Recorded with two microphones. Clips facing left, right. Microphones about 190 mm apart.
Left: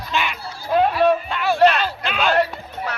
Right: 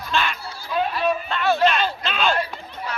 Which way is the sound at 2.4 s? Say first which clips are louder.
Left 7 dB; 70° left (ahead or behind).